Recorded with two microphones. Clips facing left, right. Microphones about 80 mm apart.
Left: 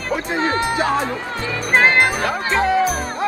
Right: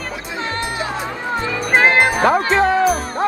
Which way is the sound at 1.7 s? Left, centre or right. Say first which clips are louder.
Right 1 dB; centre.